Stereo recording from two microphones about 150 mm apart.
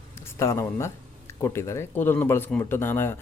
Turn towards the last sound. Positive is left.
turn(degrees=15)  # may be behind; listen again after turning